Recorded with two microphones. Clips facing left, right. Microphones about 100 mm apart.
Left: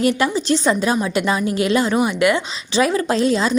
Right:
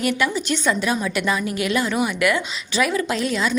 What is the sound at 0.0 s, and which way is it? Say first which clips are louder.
A woman's voice: left 4 dB; 30° left (ahead or behind).